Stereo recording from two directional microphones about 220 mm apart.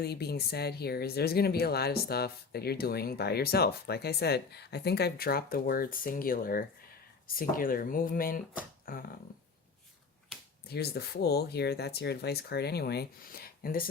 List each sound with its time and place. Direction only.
0.0 s speech: 45° left (ahead or behind)
8.9 s a sound: 40° left (ahead or behind)
10.7 s speech: 45° left (ahead or behind)